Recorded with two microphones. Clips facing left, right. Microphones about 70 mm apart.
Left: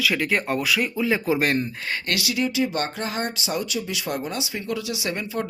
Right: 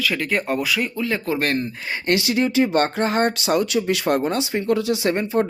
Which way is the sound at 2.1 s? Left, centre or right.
Right.